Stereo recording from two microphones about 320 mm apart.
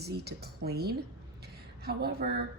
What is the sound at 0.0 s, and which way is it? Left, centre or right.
A woman's voice, right.